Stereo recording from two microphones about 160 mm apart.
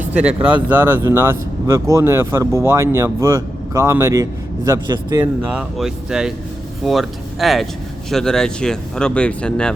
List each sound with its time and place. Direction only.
0.0 s speech: 10° right (ahead or behind); by 5.2 s 25° right (ahead or behind)
5.2 s speech: 10° right (ahead or behind)